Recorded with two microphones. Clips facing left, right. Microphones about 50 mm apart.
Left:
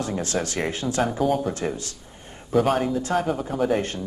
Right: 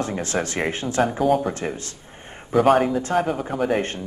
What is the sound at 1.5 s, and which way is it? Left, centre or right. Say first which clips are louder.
Speech: even; right.